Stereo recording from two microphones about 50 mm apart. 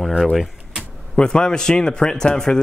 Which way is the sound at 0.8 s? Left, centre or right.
Centre.